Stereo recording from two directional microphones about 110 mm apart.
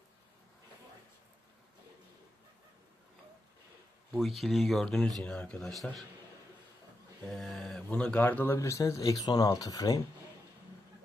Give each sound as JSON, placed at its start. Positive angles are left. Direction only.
{"t": 4.2, "sound": "speech", "side_deg": 0}
{"t": 7.3, "sound": "speech", "side_deg": 0}
{"t": 8.5, "sound": "speech", "side_deg": 30}